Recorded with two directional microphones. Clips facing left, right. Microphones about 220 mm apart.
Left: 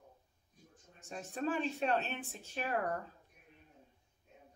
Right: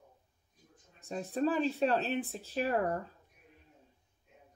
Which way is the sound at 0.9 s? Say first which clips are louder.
Right 7 dB; 35° right (ahead or behind).